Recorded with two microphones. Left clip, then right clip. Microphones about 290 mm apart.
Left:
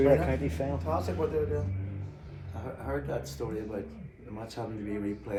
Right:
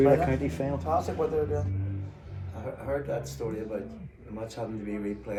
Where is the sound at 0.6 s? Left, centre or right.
Right.